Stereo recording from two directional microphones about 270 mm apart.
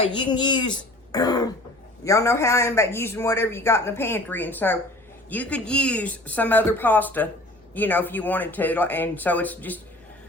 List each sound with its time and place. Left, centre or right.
0.0 s a man's voice: centre